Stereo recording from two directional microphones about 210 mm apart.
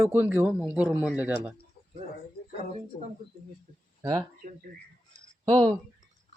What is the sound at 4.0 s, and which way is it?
Speech, 15° right (ahead or behind).